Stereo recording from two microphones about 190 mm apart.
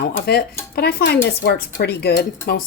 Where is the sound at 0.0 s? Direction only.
60° left (ahead or behind).